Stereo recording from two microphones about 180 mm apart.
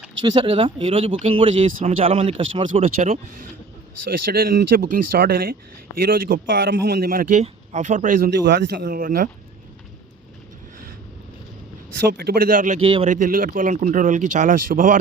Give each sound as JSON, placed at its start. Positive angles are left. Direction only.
{"t": 0.2, "sound": "speech", "side_deg": -30}
{"t": 2.8, "sound": "speech", "side_deg": -45}
{"t": 4.3, "sound": "speech", "side_deg": -55}
{"t": 8.3, "sound": "speech", "side_deg": -70}
{"t": 11.9, "sound": "speech", "side_deg": -65}
{"t": 12.8, "sound": "speech", "side_deg": -30}
{"t": 13.1, "sound": "speech", "side_deg": -50}